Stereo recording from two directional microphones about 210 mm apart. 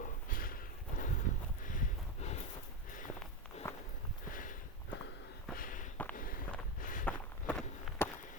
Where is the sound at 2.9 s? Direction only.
40° left (ahead or behind).